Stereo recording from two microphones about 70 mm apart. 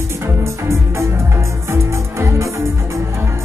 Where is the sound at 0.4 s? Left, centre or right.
Right.